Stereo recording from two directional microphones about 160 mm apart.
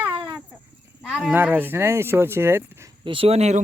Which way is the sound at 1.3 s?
10° right (ahead or behind).